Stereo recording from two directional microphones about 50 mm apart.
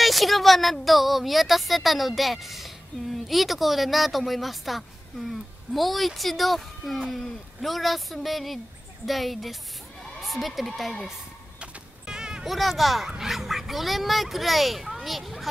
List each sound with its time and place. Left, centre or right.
0.0 s a woman's voice: centre
11.6 s music: centre
12.4 s a child's voice: centre